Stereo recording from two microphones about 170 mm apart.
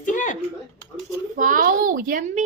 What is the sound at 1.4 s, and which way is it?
A woman's voice, 50° right (ahead or behind).